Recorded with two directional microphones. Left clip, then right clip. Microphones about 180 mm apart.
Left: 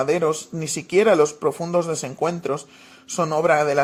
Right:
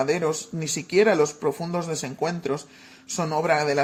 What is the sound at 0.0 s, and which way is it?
A man's voice, 40° left (ahead or behind).